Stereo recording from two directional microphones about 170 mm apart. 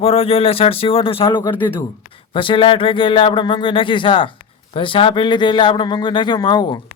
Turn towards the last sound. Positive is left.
turn(degrees=25)  # may be behind; listen again after turning